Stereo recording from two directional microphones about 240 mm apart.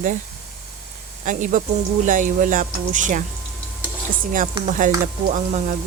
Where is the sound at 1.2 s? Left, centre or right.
Right.